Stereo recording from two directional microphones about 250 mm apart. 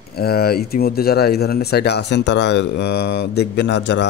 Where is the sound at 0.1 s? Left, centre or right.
Left.